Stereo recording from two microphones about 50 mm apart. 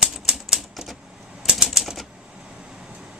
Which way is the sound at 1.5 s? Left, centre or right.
Centre.